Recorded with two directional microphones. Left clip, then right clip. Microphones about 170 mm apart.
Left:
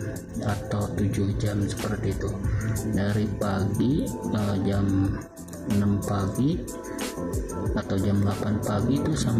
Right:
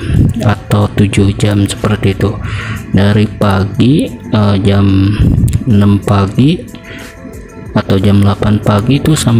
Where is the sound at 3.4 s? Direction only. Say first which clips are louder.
Right 14 dB; 20° right (ahead or behind).